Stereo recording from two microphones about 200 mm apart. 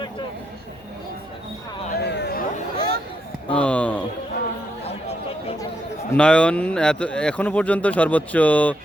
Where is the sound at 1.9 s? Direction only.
55° left (ahead or behind).